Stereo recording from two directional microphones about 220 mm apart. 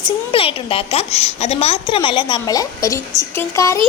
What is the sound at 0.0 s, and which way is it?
A child's voice, 25° left (ahead or behind).